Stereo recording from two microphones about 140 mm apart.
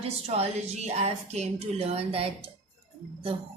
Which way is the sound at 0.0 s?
50° right (ahead or behind).